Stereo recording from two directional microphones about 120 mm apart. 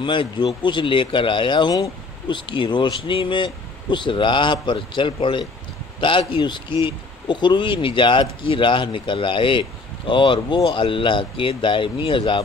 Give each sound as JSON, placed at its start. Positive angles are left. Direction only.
{"t": 0.0, "sound": "speech", "side_deg": 40}